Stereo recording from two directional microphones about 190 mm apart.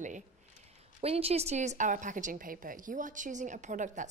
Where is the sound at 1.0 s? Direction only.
30° right (ahead or behind).